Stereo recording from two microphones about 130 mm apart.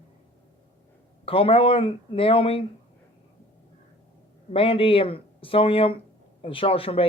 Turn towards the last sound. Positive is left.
turn(degrees=45)  # may be behind; listen again after turning